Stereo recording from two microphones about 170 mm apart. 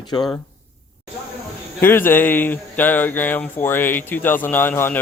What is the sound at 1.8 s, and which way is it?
Speech, 10° left (ahead or behind).